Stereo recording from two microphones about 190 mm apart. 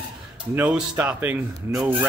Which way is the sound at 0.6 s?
10° right (ahead or behind).